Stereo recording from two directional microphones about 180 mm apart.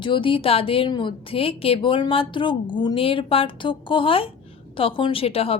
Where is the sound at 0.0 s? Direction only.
25° left (ahead or behind).